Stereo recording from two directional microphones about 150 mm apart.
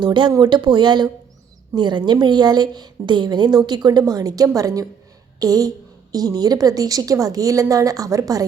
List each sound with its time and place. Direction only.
0.0 s a woman's voice: 30° right (ahead or behind)